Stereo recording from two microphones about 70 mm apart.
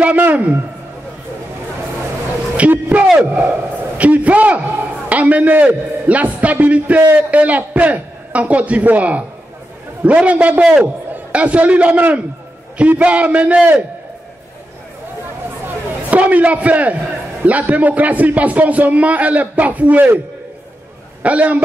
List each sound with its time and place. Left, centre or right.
0.0 s a man's voice: right
2.5 s a man's voice: right
3.1 s a man's voice: centre
7.0 s a man's voice: right
7.2 s a man's voice: right
15.6 s a sound: right
17.5 s a man's voice: right
21.2 s a man's voice: centre